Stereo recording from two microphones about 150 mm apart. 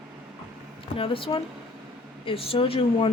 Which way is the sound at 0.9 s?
35° left (ahead or behind).